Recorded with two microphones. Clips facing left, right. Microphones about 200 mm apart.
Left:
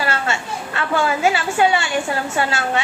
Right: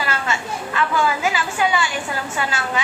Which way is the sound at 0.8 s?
25° left (ahead or behind).